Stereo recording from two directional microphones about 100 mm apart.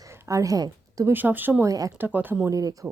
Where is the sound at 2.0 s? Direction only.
20° right (ahead or behind).